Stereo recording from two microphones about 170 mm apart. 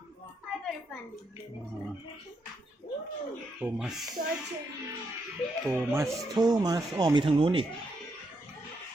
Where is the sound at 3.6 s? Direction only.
5° right (ahead or behind).